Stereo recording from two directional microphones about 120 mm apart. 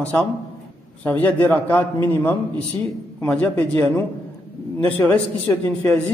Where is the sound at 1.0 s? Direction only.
15° left (ahead or behind).